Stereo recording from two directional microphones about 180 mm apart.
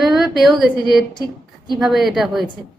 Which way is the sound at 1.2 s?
25° right (ahead or behind).